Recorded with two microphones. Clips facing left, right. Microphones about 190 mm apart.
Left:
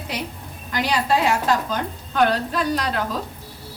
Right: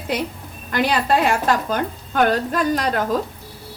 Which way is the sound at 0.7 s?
55° right (ahead or behind).